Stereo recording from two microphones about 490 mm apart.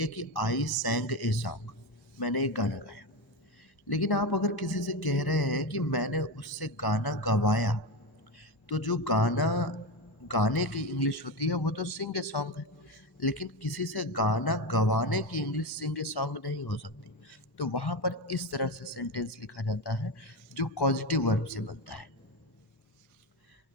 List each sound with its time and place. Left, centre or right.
0.0 s speech: left